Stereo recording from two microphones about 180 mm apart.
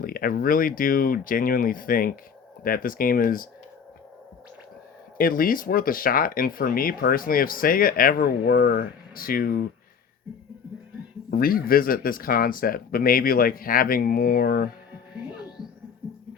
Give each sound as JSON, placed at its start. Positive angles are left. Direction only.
{"t": 0.0, "sound": "speech", "side_deg": 55}
{"t": 5.1, "sound": "speech", "side_deg": 55}
{"t": 11.3, "sound": "speech", "side_deg": 55}